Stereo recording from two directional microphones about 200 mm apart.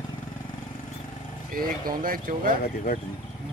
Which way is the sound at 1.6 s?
45° right (ahead or behind).